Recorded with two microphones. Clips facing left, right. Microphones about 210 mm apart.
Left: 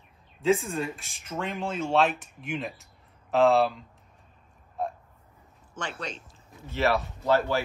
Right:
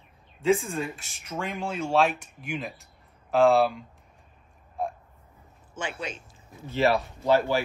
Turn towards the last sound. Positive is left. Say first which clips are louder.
# right 2 dB
turn(degrees=-10)  # may be behind; listen again after turning